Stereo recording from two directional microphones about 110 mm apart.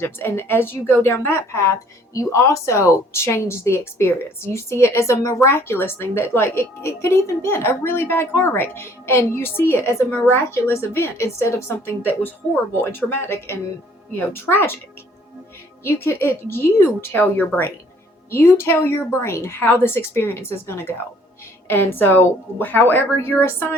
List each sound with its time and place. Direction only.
0.0 s a woman's voice: 20° left (ahead or behind)
15.8 s a woman's voice: 20° left (ahead or behind)